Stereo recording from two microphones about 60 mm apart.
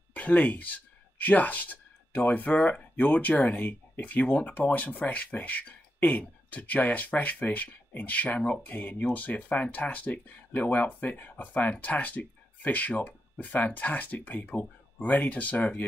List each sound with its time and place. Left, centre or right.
0.1 s speech: left